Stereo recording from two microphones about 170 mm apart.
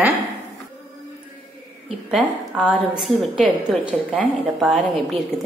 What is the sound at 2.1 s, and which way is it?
A woman's voice, 5° right (ahead or behind).